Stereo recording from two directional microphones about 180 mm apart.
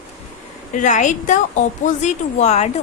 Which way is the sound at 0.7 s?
45° left (ahead or behind).